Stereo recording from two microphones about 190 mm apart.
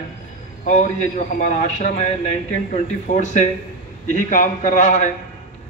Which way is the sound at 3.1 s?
40° left (ahead or behind).